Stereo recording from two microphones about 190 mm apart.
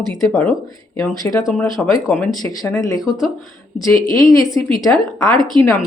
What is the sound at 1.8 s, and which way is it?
Speech, 5° left (ahead or behind).